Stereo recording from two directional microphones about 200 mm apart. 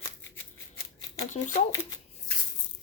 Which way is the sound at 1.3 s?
40° left (ahead or behind).